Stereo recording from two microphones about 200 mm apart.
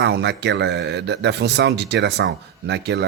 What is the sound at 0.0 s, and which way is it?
Speech, 60° right (ahead or behind).